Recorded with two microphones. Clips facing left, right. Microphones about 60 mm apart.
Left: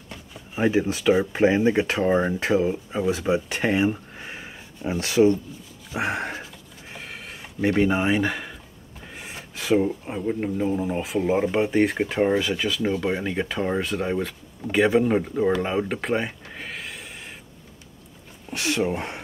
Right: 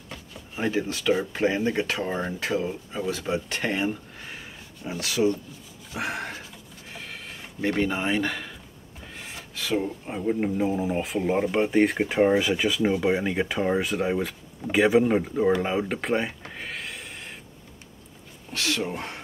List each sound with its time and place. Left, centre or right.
0.6 s speech: centre
5.9 s a sound: left
9.1 s filing: centre
10.1 s speech: centre
18.5 s speech: left